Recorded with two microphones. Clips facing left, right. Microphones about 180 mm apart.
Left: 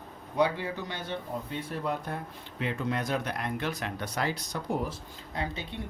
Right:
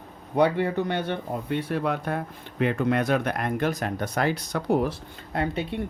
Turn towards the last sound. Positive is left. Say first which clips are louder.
# right 8 dB
turn(degrees=-60)  # may be behind; listen again after turning